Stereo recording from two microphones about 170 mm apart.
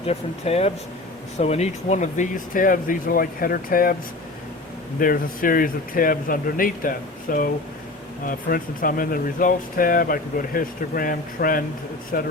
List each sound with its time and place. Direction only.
0.0 s speech: 35° left (ahead or behind); by 3.9 s 60° left (ahead or behind)
4.9 s speech: 55° left (ahead or behind)